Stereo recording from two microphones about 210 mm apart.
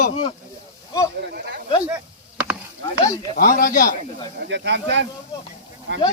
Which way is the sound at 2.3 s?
10° right (ahead or behind).